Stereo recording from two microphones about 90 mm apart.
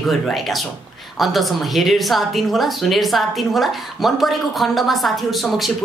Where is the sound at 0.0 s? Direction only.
Centre (ahead or behind).